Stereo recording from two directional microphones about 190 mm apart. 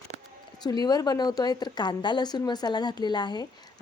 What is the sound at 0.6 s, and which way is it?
A woman's voice, 20° left (ahead or behind).